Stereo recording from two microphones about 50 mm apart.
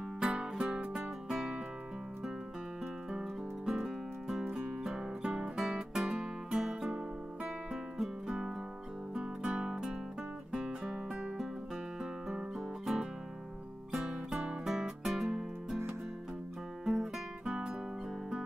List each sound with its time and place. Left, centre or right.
0.2 s music: centre
0.9 s music: centre
3.1 s music: centre
5.6 s music: centre
8.3 s music: centre
14.3 s music: centre
16.8 s music: centre